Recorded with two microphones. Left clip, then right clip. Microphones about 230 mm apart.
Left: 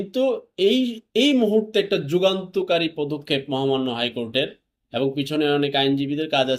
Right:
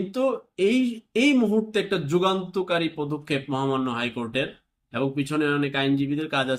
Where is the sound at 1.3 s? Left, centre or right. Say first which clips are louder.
Left 2 dB; centre.